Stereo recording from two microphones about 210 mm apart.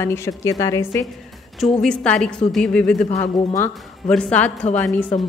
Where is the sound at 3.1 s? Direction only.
30° left (ahead or behind).